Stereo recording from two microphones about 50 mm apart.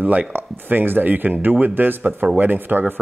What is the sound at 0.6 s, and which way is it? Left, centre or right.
Speech, right.